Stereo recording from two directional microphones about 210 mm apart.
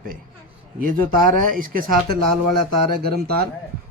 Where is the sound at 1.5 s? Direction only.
40° right (ahead or behind).